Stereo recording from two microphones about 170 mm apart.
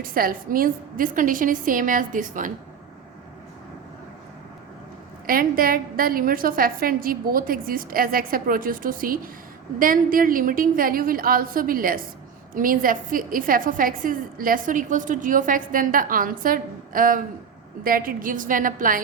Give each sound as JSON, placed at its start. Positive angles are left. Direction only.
{"t": 0.0, "sound": "a woman's voice", "side_deg": -60}
{"t": 5.2, "sound": "a woman's voice", "side_deg": -60}